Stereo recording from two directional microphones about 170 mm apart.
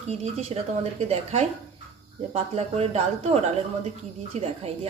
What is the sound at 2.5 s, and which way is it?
Speech, 40° right (ahead or behind).